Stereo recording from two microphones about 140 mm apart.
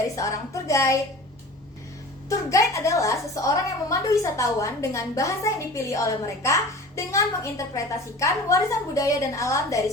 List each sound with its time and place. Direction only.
0.2 s a woman's voice: 25° left (ahead or behind)
2.5 s a woman's voice: 20° left (ahead or behind)